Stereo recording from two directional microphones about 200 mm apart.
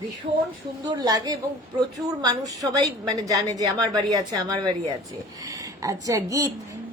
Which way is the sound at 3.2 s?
15° right (ahead or behind).